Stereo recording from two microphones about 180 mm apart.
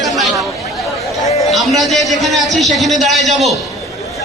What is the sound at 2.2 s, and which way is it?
A man's voice, centre (ahead or behind).